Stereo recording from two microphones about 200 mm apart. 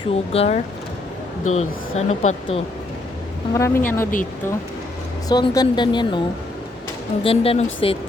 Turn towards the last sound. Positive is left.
turn(degrees=30)  # may be behind; listen again after turning